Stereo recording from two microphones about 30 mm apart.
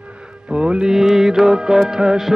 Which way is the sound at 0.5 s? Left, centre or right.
Right.